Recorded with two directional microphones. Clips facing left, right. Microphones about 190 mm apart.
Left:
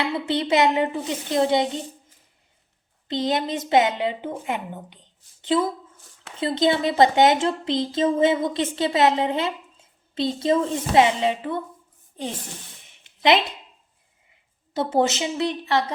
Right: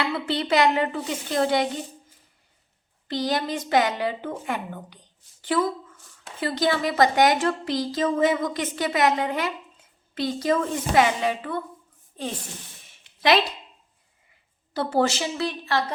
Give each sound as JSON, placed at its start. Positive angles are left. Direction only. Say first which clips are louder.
{"t": 0.0, "sound": "a woman's voice", "louder": "left 2 dB", "side_deg": 20}
{"t": 3.1, "sound": "a woman's voice", "louder": "left 2 dB", "side_deg": 20}
{"t": 14.7, "sound": "a woman's voice", "louder": "left 1 dB", "side_deg": 20}